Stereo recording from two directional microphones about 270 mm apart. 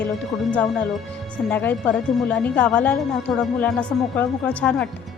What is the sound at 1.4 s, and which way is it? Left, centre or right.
Speech, centre.